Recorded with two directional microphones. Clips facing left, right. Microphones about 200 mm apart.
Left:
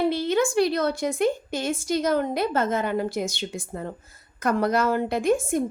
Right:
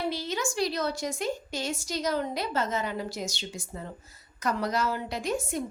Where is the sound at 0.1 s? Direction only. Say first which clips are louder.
Left 9 dB; 55° left (ahead or behind).